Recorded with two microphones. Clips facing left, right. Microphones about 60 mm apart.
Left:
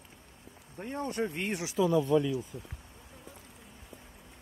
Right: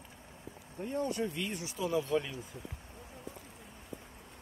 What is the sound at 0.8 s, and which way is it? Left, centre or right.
Speech, left.